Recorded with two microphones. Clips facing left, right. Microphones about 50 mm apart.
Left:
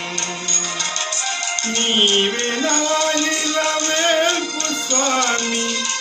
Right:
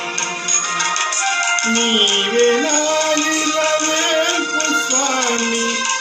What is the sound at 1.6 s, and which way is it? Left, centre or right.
Music, right.